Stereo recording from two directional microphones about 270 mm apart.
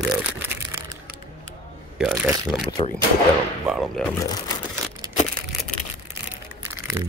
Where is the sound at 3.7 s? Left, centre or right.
Centre.